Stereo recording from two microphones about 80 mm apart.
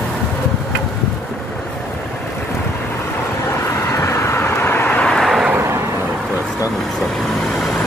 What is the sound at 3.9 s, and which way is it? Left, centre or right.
Vehicle, left.